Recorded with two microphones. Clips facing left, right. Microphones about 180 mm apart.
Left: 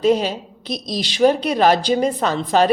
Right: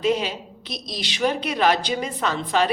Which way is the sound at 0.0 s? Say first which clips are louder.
Left 5 dB; 40° left (ahead or behind).